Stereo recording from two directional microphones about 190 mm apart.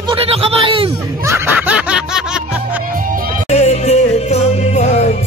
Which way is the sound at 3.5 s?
35° left (ahead or behind).